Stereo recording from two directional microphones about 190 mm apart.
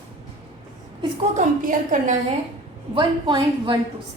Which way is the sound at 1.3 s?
40° right (ahead or behind).